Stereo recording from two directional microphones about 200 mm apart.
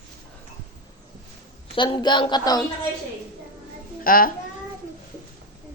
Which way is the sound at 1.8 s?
25° left (ahead or behind).